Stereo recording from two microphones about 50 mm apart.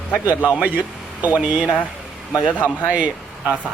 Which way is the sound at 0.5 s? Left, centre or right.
Right.